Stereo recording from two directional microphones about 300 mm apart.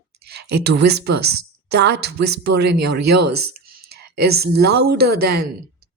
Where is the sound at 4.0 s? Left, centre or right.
Right.